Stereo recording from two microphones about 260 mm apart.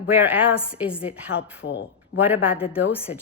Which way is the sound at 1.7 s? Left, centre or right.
Left.